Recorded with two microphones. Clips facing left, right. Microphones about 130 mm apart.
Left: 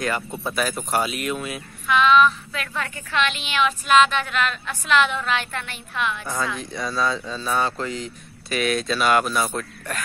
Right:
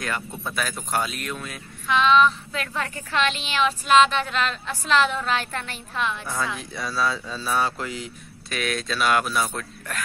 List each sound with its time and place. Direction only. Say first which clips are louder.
0.0 s speech: left 4 dB; 5° left (ahead or behind)
1.9 s a woman's voice: left 2 dB; 30° right (ahead or behind)
6.2 s speech: left 2 dB; 5° right (ahead or behind)